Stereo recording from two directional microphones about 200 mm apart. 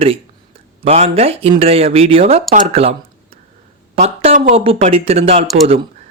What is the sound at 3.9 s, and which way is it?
Speech, 35° right (ahead or behind).